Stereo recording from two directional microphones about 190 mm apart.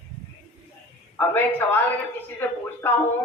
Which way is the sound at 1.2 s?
10° left (ahead or behind).